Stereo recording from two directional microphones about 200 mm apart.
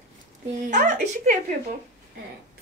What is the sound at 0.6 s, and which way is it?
Speech, 40° right (ahead or behind).